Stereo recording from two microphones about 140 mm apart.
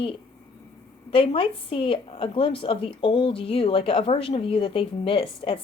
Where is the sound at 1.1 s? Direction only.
40° left (ahead or behind).